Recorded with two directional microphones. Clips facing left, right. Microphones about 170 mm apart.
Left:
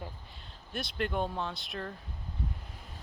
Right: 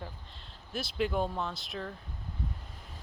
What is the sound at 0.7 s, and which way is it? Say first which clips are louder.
Speech: right 2 dB; centre (ahead or behind).